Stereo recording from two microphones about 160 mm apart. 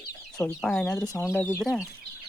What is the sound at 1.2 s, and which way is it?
Speech, 15° left (ahead or behind).